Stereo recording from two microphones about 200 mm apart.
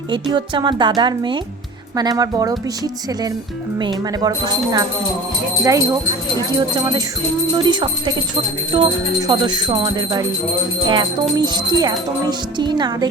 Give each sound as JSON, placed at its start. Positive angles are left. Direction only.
{"t": 0.1, "sound": "jingle bell", "side_deg": -25}
{"t": 5.6, "sound": "speech", "side_deg": -15}
{"t": 6.6, "sound": "jingle bell", "side_deg": -20}